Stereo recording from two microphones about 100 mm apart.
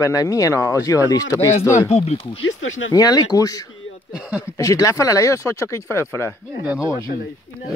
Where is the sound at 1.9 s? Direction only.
90° left.